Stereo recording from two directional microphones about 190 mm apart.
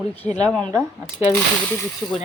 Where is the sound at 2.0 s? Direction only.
Centre (ahead or behind).